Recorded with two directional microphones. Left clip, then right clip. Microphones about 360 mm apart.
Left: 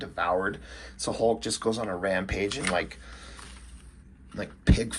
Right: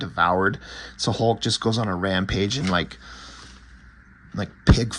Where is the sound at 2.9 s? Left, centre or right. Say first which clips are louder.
Right 5 dB; centre.